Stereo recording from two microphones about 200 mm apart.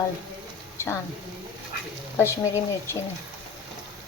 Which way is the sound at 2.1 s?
15° left (ahead or behind).